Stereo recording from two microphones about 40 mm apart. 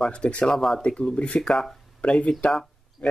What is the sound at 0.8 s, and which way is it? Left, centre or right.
Speech, left.